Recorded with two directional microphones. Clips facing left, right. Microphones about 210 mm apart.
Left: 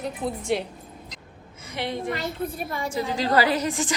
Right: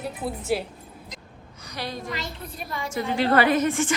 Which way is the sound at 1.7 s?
25° left (ahead or behind).